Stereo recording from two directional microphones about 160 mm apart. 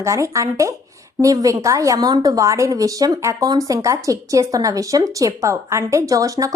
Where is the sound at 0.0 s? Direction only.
20° right (ahead or behind).